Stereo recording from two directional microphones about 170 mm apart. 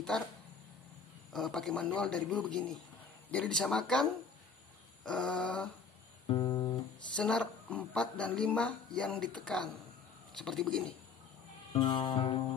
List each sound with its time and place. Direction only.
1.3 s speech: centre (ahead or behind)
6.2 s guitar: 30° left (ahead or behind)
7.2 s speech: 5° left (ahead or behind)
11.7 s music: 25° left (ahead or behind)